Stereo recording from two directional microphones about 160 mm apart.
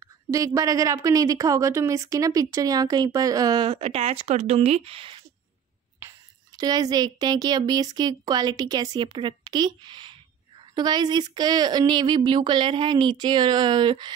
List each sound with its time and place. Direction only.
0.0 s a woman's voice: 20° right (ahead or behind)
5.9 s a woman's voice: 20° right (ahead or behind)